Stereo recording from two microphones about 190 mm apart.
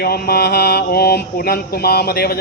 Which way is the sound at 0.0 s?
55° left (ahead or behind).